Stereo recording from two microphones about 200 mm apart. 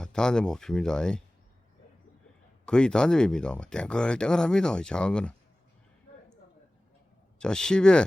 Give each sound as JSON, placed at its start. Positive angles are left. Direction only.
{"t": 0.0, "sound": "speech", "side_deg": 5}
{"t": 2.6, "sound": "speech", "side_deg": 5}
{"t": 6.1, "sound": "a sound", "side_deg": 35}
{"t": 7.3, "sound": "speech", "side_deg": 5}